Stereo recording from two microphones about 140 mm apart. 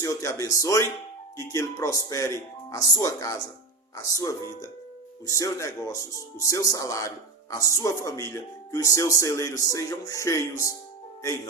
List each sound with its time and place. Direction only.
0.0 s speech: 25° left (ahead or behind)